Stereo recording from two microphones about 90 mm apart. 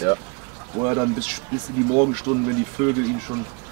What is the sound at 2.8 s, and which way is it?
Speech, 20° right (ahead or behind).